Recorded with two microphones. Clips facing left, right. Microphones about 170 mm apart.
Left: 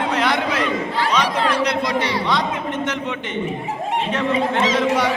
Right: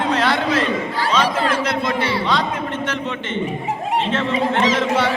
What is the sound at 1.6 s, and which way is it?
Speech, 15° left (ahead or behind).